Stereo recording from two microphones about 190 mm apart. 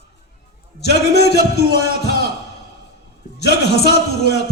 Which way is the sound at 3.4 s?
60° left (ahead or behind).